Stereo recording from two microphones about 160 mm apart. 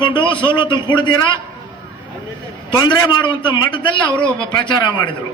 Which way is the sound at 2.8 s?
25° left (ahead or behind).